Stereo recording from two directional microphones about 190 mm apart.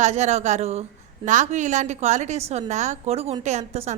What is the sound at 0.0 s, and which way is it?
A woman's voice, 35° right (ahead or behind).